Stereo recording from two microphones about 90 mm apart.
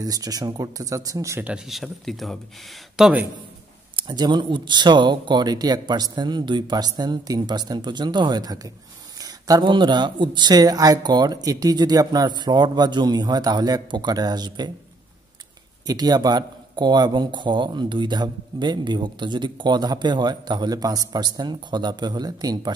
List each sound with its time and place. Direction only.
0.0 s speech: 45° right (ahead or behind)
1.7 s speech: centre (ahead or behind)
3.9 s speech: 55° right (ahead or behind)
9.2 s a sound: 45° right (ahead or behind)
9.7 s speech: 60° right (ahead or behind)
15.9 s speech: 45° right (ahead or behind)